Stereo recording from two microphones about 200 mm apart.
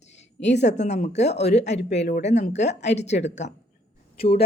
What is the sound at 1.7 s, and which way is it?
Speech, 60° left (ahead or behind).